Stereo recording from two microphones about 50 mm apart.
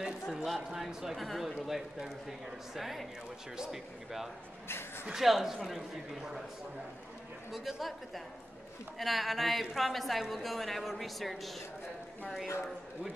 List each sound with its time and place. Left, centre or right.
0.0 s speech: centre
4.6 s speech: left
5.0 s speech: centre
7.5 s speech: centre